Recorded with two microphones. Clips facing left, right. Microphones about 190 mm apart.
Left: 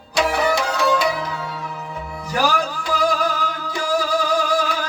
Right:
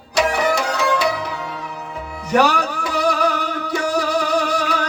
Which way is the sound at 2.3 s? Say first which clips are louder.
Right 4 dB; 70° right (ahead or behind).